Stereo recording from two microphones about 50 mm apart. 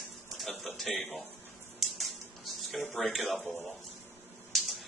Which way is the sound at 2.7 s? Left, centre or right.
Centre.